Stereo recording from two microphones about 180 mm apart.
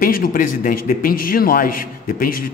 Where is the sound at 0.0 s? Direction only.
50° left (ahead or behind).